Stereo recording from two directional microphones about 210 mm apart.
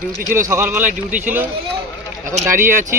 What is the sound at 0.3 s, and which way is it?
Speech, 15° right (ahead or behind).